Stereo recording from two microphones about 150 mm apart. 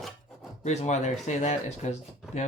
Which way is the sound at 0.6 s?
50° left (ahead or behind).